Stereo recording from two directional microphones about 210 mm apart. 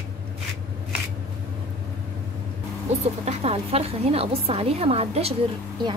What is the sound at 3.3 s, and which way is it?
Speech, 30° right (ahead or behind).